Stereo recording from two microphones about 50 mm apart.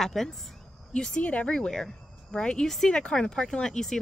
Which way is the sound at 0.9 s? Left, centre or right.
Centre.